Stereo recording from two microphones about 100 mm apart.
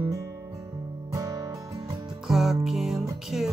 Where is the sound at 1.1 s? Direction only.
35° right (ahead or behind).